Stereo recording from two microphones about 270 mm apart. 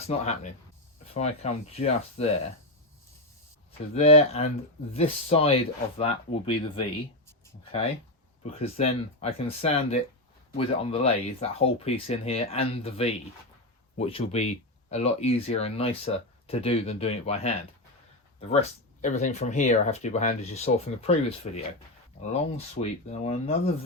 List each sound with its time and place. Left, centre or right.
1.1 s speech: left
3.9 s speech: left
7.3 s a sound: centre
8.4 s speech: left
19.0 s speech: left